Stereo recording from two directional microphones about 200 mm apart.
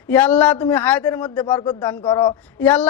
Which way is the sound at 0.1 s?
10° left (ahead or behind).